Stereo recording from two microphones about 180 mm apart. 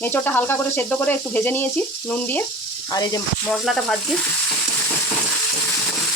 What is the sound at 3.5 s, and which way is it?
Speech, centre (ahead or behind).